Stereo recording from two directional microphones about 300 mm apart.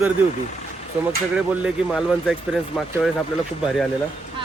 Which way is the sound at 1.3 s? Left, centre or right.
Centre.